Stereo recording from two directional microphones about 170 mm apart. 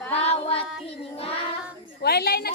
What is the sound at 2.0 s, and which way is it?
Speech, 65° left (ahead or behind).